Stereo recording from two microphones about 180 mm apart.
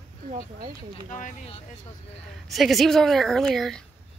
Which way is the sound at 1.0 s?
45° left (ahead or behind).